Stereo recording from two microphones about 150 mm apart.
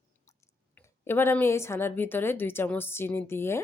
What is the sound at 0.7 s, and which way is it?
A woman's voice, 15° left (ahead or behind).